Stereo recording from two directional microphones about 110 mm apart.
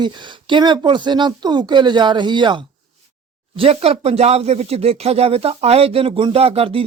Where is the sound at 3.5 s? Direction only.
65° right (ahead or behind).